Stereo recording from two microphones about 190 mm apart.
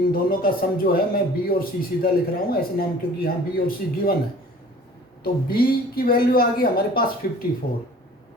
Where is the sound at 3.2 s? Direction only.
50° left (ahead or behind).